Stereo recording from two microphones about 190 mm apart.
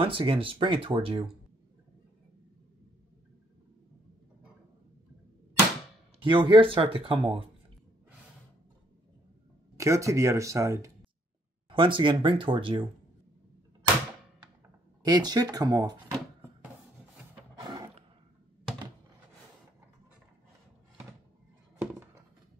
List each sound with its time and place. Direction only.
0.0 s speech: 25° right (ahead or behind)
6.2 s speech: 25° right (ahead or behind)
9.8 s speech: 15° right (ahead or behind)
11.7 s speech: 25° right (ahead or behind)
15.0 s speech: 20° right (ahead or behind)
17.6 s music: 20° right (ahead or behind)